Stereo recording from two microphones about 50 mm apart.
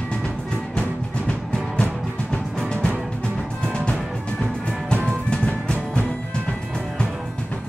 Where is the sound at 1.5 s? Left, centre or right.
Centre.